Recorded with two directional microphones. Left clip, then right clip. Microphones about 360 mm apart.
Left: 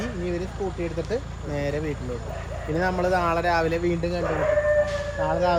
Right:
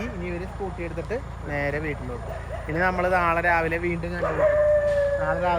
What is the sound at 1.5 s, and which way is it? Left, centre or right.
Speech, centre.